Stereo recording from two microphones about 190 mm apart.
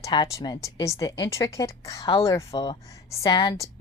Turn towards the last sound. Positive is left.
turn(degrees=20)  # may be behind; listen again after turning